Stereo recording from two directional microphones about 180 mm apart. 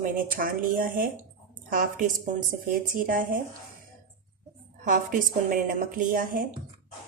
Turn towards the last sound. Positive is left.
turn(degrees=-50)  # may be behind; listen again after turning